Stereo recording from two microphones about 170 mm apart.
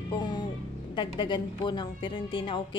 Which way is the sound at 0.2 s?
25° left (ahead or behind).